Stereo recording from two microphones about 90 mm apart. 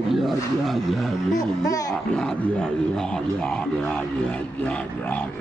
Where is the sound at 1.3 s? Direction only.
40° left (ahead or behind).